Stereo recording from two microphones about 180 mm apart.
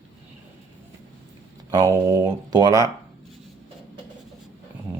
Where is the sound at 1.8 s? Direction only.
20° right (ahead or behind).